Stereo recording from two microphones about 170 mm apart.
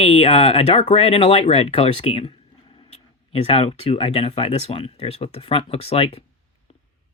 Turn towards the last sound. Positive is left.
turn(degrees=35)  # may be behind; listen again after turning